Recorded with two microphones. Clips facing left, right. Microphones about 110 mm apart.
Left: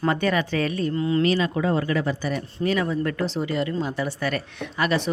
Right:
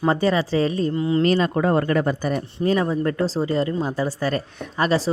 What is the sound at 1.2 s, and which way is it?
Speech, 45° right (ahead or behind).